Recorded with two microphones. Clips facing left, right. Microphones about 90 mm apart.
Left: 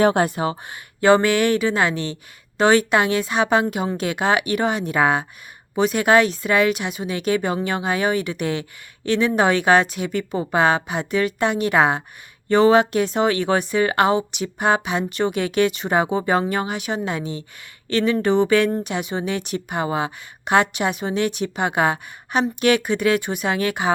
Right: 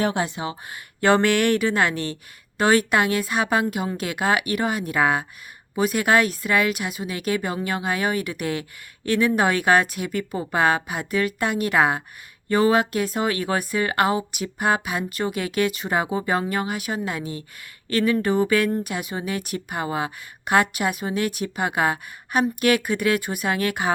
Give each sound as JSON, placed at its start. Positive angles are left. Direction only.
{"t": 0.0, "sound": "speech", "side_deg": 55}
{"t": 1.0, "sound": "a woman's voice", "side_deg": 20}